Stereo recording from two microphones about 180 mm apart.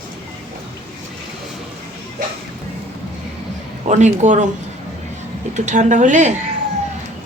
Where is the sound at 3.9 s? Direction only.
40° right (ahead or behind).